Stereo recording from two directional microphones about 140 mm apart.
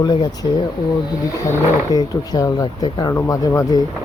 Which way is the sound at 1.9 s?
30° left (ahead or behind).